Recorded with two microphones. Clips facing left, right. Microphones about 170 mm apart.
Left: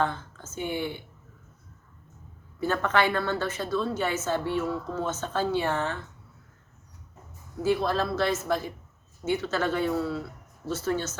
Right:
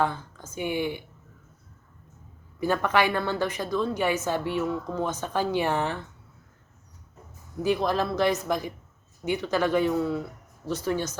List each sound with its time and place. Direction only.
0.0 s a woman's voice: 15° right (ahead or behind)
2.6 s a woman's voice: 15° right (ahead or behind)
7.6 s a woman's voice: 15° right (ahead or behind)